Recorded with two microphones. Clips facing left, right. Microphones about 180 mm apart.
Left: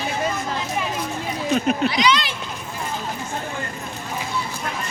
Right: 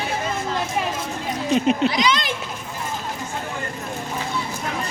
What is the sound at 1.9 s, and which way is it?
Speech, 45° right (ahead or behind).